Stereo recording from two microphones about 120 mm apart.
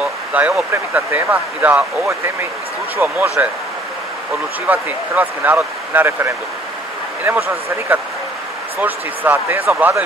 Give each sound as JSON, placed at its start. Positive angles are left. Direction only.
{"t": 0.0, "sound": "a sound", "side_deg": -10}
{"t": 0.9, "sound": "speech", "side_deg": -15}
{"t": 3.0, "sound": "speech", "side_deg": -15}
{"t": 4.6, "sound": "speech", "side_deg": -15}